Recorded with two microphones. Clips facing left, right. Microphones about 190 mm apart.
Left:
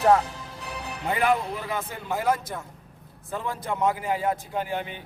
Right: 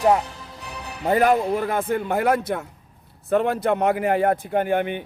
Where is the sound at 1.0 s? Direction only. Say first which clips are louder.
Right 6 dB; 45° right (ahead or behind).